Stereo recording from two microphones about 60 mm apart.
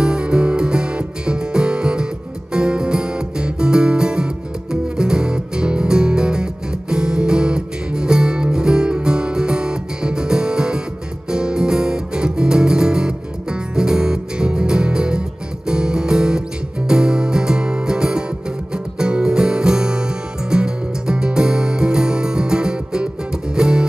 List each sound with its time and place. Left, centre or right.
0.0 s music: centre